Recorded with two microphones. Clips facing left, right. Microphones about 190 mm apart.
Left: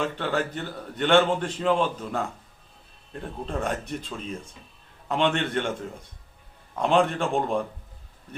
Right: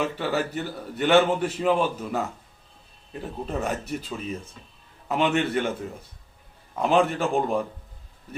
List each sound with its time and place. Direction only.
0.0 s a man's voice: 5° right (ahead or behind)